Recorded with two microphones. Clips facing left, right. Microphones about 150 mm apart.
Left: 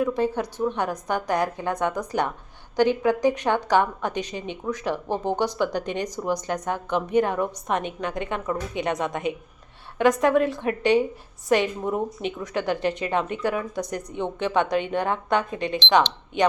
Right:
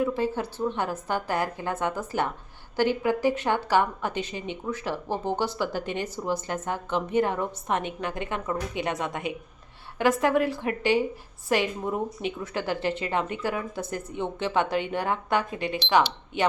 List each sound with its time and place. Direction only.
0.0 s a woman's voice: 15° left (ahead or behind)